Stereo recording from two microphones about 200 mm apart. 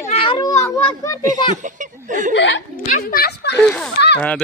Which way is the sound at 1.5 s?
40° right (ahead or behind).